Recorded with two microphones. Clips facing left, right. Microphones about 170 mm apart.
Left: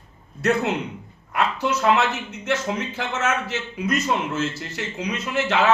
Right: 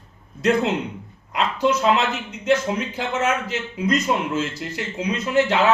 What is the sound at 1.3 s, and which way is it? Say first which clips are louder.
A man's voice: right 2 dB; 15° right (ahead or behind).